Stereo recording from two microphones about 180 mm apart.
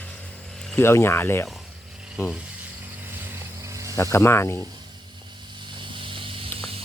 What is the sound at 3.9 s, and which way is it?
Speech, 15° left (ahead or behind).